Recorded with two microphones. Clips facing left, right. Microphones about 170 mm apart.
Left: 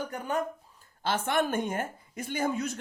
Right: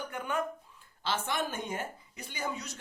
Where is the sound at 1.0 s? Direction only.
55° left (ahead or behind).